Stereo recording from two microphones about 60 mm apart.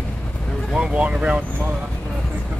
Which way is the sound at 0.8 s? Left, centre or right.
Centre.